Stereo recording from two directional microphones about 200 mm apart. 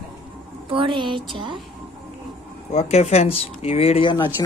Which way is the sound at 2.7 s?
35° left (ahead or behind).